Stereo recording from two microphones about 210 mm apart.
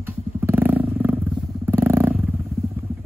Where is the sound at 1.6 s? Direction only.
10° right (ahead or behind).